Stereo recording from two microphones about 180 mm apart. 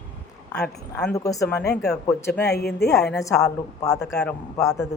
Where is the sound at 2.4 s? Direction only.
65° left (ahead or behind).